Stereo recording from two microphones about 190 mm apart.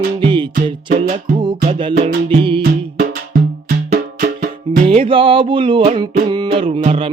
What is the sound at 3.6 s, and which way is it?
Music, 50° right (ahead or behind).